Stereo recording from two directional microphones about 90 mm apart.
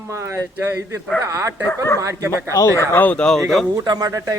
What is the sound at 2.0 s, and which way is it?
Speech, 35° right (ahead or behind).